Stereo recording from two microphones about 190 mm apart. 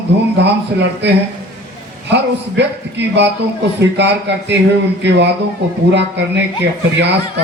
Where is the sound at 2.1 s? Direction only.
65° right (ahead or behind).